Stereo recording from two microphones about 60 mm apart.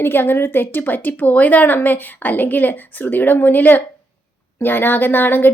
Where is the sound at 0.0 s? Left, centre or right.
Left.